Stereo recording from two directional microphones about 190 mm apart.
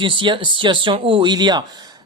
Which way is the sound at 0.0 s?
25° right (ahead or behind).